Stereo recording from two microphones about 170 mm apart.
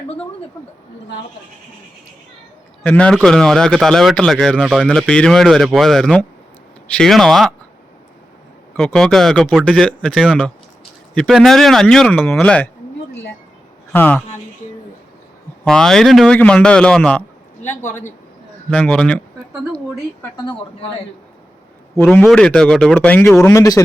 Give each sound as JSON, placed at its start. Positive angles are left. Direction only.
{"t": 2.8, "sound": "speech", "side_deg": 10}
{"t": 8.7, "sound": "speech", "side_deg": 5}
{"t": 13.9, "sound": "speech", "side_deg": 10}
{"t": 15.6, "sound": "speech", "side_deg": 5}
{"t": 17.8, "sound": "a man's voice", "side_deg": 45}
{"t": 18.7, "sound": "speech", "side_deg": 5}
{"t": 20.3, "sound": "speech", "side_deg": 25}
{"t": 21.9, "sound": "speech", "side_deg": 10}
{"t": 23.5, "sound": "speech", "side_deg": 20}